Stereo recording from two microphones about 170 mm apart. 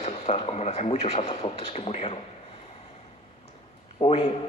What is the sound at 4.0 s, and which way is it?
Speech, 35° left (ahead or behind).